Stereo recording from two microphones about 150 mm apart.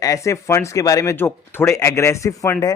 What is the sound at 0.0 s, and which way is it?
Speech, 20° left (ahead or behind).